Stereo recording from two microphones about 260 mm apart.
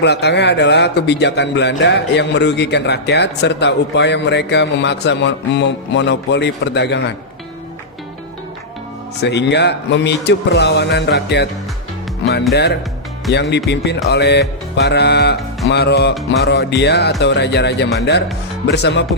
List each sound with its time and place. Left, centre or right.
0.0 s speech: left
9.2 s speech: left
13.3 s speech: left